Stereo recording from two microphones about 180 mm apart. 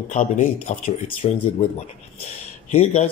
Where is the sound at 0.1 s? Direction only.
45° left (ahead or behind).